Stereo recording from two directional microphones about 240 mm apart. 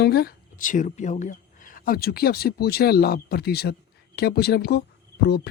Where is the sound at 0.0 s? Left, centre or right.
Left.